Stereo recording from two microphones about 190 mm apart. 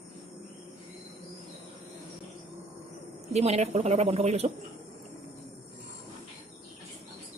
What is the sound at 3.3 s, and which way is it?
A woman's voice, 35° right (ahead or behind).